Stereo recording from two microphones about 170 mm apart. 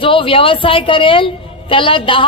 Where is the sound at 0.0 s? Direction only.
30° left (ahead or behind).